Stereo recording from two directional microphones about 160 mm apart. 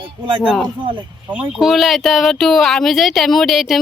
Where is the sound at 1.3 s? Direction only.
Centre (ahead or behind).